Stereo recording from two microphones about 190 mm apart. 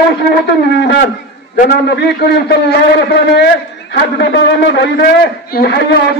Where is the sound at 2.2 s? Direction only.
60° left (ahead or behind).